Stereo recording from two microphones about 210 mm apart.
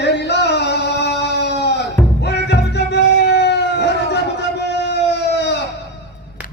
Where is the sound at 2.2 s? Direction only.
55° left (ahead or behind).